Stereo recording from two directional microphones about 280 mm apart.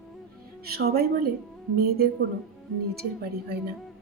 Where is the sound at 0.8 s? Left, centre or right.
Right.